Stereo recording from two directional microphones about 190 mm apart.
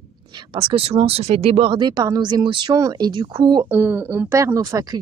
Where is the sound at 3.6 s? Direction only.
10° right (ahead or behind).